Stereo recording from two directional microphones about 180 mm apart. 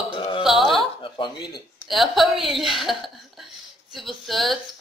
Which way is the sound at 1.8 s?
Centre (ahead or behind).